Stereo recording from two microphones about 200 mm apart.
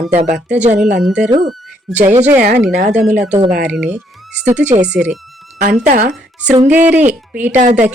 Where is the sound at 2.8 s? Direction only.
35° right (ahead or behind).